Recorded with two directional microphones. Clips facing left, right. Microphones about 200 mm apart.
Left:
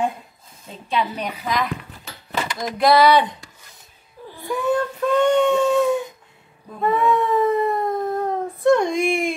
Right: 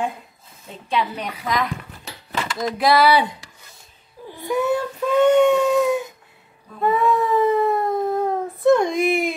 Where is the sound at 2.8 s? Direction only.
5° right (ahead or behind).